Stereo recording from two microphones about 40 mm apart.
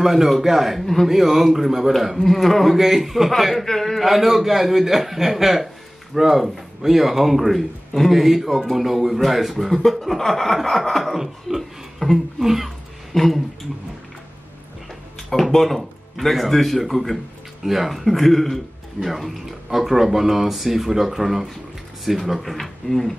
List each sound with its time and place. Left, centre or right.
0.0 s a man's voice: centre
13.1 s speech: centre
15.2 s a man's voice: centre